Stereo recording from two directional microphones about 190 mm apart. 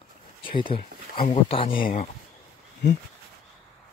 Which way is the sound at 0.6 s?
25° left (ahead or behind).